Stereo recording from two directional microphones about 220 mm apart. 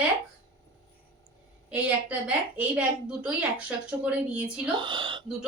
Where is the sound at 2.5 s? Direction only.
5° right (ahead or behind).